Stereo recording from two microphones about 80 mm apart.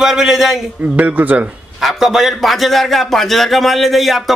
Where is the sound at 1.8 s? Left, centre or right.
Centre.